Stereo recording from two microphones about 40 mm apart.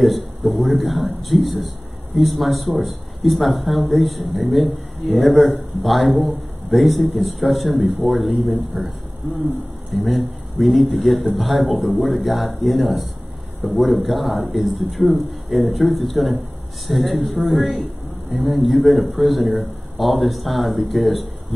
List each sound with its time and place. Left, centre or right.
0.0 s speech: centre
9.9 s speech: centre
14.0 s speech: centre